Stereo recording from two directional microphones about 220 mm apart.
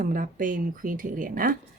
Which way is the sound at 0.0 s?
40° right (ahead or behind).